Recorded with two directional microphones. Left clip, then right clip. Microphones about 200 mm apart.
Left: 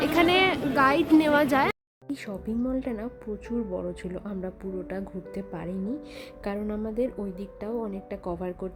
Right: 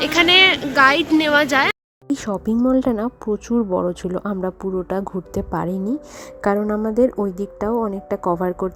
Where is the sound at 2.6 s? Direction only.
30° right (ahead or behind).